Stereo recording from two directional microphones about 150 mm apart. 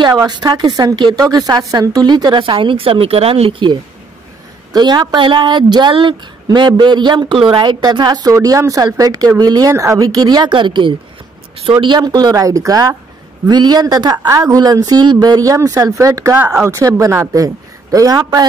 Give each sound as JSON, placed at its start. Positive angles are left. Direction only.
{"t": 0.0, "sound": "a woman's voice", "side_deg": -25}
{"t": 4.7, "sound": "a woman's voice", "side_deg": -30}